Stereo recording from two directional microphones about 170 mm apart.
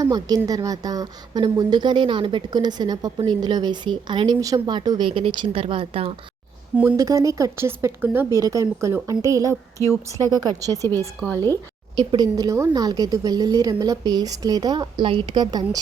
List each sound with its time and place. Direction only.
0.0 s speech: 20° right (ahead or behind)
6.7 s speech: 15° right (ahead or behind)
11.9 s speech: 25° right (ahead or behind)